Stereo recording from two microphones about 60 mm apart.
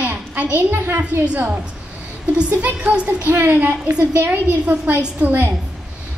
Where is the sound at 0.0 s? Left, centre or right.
Right.